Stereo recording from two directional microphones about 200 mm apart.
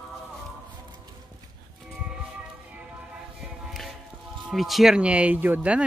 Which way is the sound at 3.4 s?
Centre (ahead or behind).